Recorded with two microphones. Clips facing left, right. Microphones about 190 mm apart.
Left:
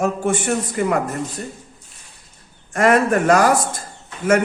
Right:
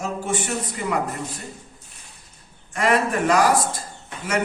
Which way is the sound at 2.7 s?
45° left (ahead or behind).